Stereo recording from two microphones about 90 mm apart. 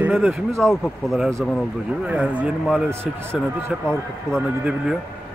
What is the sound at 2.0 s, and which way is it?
Speech, 10° right (ahead or behind).